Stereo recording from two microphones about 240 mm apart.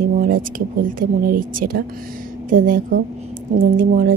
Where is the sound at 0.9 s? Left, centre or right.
Right.